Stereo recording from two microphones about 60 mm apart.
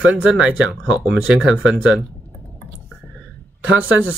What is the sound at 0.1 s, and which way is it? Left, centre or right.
Speech, centre.